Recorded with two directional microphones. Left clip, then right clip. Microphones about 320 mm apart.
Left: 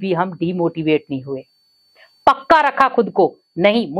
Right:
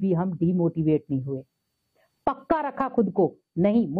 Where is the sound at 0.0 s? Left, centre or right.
Centre.